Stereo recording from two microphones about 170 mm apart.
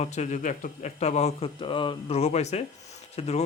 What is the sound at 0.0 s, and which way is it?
Speech, 45° left (ahead or behind).